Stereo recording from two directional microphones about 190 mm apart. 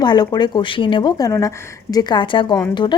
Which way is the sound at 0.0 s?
20° left (ahead or behind).